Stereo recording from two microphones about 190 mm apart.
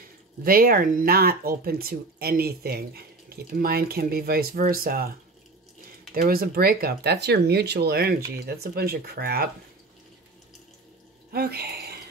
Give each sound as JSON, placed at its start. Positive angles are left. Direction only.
{"t": 0.4, "sound": "speech", "side_deg": -50}
{"t": 6.1, "sound": "speech", "side_deg": -50}
{"t": 11.3, "sound": "speech", "side_deg": -55}